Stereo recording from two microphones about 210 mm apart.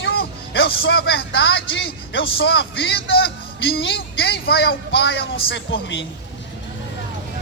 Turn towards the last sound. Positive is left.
turn(degrees=60)  # may be behind; listen again after turning